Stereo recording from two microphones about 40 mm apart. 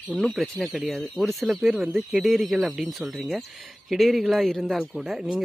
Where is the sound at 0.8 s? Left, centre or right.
Centre.